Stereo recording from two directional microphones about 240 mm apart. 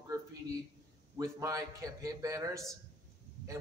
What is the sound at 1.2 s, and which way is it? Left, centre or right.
A man's voice, centre.